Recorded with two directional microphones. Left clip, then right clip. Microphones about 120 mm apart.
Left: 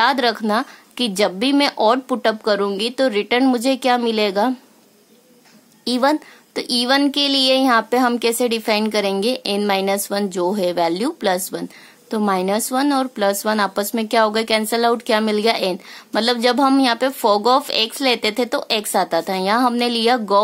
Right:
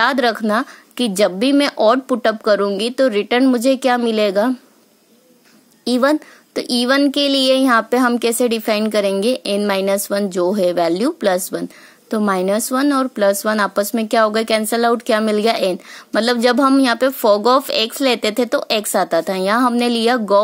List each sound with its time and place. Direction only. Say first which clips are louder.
0.0 s a woman's voice: right 1 dB; 30° right (ahead or behind)
5.9 s a woman's voice: right 2 dB; 25° right (ahead or behind)